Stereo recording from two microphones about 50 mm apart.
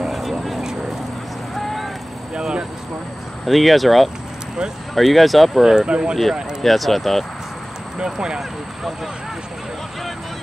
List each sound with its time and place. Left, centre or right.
0.0 s a sound: centre
1.5 s vehicle: centre
2.3 s vehicle: centre
3.4 s speech: centre
5.6 s speech: centre
6.6 s speech: centre
8.0 s speech: centre